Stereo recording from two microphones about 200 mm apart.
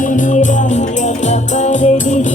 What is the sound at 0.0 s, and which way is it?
Music, 40° left (ahead or behind).